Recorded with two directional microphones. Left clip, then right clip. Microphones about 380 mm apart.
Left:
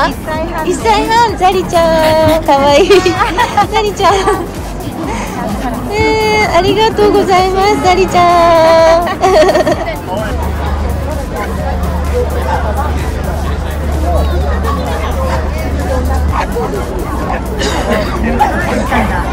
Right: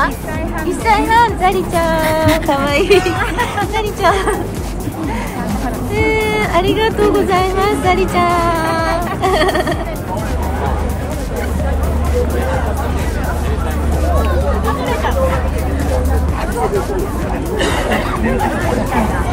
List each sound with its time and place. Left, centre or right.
0.7 s speech: centre
5.9 s speech: centre
17.6 s a sound: right